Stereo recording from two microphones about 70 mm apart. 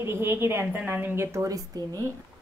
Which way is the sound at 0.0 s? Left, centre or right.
Right.